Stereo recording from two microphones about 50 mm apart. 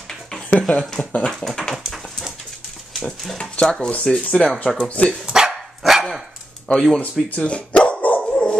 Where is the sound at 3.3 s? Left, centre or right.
Left.